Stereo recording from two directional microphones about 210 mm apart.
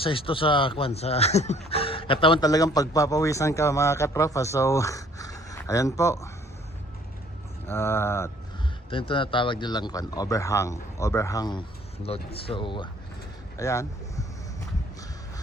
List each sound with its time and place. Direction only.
0.0 s speech: 25° left (ahead or behind)
7.7 s speech: 10° left (ahead or behind)
8.9 s speech: 25° left (ahead or behind)